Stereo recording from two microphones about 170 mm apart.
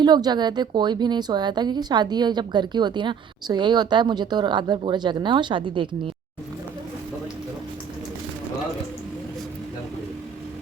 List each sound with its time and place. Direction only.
0.0 s a woman's voice: 25° right (ahead or behind)